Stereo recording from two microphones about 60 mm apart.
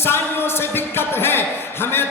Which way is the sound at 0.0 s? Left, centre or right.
Left.